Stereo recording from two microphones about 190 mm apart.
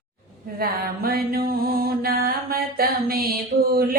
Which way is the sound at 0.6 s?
55° right (ahead or behind).